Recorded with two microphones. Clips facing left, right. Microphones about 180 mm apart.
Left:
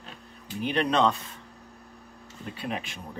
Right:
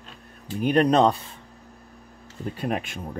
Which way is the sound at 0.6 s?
45° right (ahead or behind).